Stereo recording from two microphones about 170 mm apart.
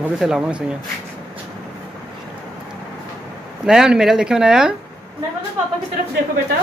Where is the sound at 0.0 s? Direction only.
5° right (ahead or behind).